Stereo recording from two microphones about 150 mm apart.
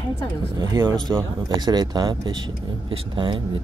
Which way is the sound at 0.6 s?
30° right (ahead or behind).